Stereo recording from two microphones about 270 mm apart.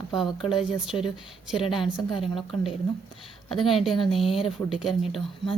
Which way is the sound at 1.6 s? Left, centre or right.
Centre.